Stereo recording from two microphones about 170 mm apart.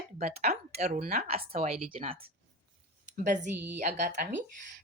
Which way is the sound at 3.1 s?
45° right (ahead or behind).